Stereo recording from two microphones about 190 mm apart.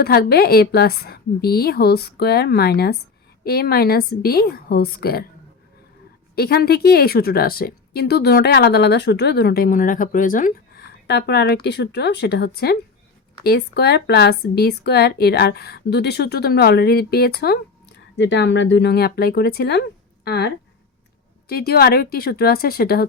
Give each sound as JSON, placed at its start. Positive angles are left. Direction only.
{"t": 0.0, "sound": "a woman's voice", "side_deg": 55}
{"t": 6.3, "sound": "a woman's voice", "side_deg": 55}
{"t": 11.0, "sound": "a woman's voice", "side_deg": 60}